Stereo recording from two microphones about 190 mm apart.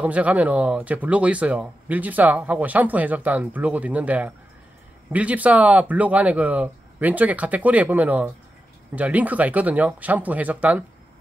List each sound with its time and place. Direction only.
0.0 s speech: 5° right (ahead or behind)